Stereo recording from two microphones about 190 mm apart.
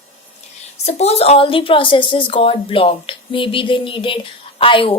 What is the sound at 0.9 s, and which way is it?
A woman's voice, 35° left (ahead or behind).